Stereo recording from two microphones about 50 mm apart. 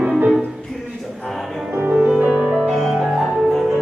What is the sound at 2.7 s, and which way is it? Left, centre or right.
Music, centre.